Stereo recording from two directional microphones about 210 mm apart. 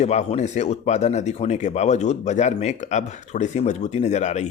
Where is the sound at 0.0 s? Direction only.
30° left (ahead or behind).